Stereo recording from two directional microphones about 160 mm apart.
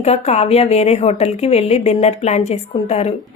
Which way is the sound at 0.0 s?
40° left (ahead or behind).